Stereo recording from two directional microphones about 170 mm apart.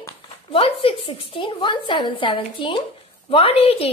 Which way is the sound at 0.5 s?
30° left (ahead or behind).